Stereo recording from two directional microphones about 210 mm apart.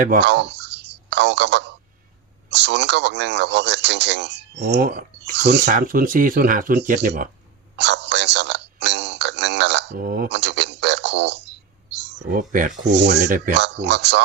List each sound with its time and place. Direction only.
0.2 s a sound: 55° right (ahead or behind)
2.5 s speech: 55° right (ahead or behind)
5.6 s speech: 40° right (ahead or behind)
7.8 s a sound: 55° right (ahead or behind)
12.3 s speech: 40° right (ahead or behind)
12.9 s speech: 55° right (ahead or behind)
13.2 s speech: 40° right (ahead or behind)
13.6 s speech: 55° right (ahead or behind)